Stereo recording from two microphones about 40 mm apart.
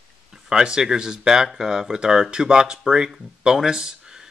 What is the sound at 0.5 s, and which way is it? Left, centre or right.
Speech, centre.